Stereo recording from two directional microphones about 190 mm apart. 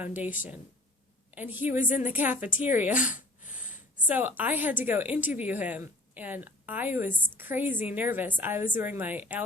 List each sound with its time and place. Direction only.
0.0 s speech: 10° right (ahead or behind)
3.1 s a sound: 45° left (ahead or behind)
4.1 s speech: 10° right (ahead or behind)